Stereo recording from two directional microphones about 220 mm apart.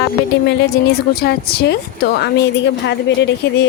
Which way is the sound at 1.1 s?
45° left (ahead or behind).